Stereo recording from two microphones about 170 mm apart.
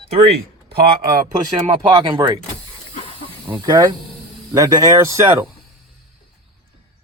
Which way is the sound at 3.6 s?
25° right (ahead or behind).